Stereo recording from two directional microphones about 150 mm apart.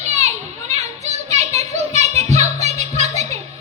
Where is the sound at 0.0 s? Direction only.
50° right (ahead or behind).